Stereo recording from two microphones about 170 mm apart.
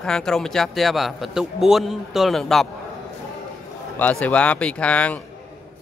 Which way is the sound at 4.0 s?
10° left (ahead or behind).